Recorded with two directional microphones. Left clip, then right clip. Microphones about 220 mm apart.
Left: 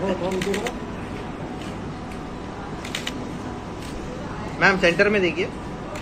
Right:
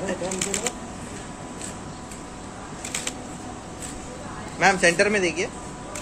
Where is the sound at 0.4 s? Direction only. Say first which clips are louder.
Left 3 dB; 45° right (ahead or behind).